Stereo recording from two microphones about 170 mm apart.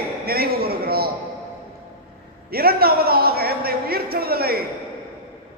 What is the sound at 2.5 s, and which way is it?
A man's voice, 65° right (ahead or behind).